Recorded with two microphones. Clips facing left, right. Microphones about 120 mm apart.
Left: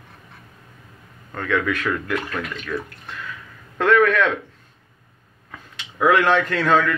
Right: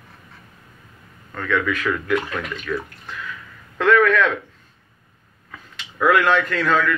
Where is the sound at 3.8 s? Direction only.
30° left (ahead or behind).